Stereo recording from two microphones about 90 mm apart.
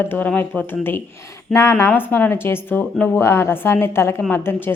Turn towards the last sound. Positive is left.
turn(degrees=25)  # may be behind; listen again after turning